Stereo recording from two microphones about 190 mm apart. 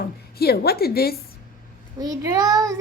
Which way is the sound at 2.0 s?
20° right (ahead or behind).